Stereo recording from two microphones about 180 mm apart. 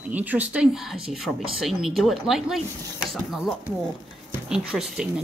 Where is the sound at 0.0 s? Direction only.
10° right (ahead or behind).